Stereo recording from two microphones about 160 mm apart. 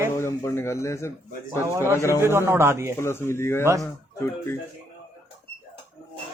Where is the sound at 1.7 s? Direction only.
15° right (ahead or behind).